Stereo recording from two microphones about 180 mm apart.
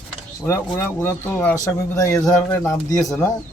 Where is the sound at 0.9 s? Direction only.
15° left (ahead or behind).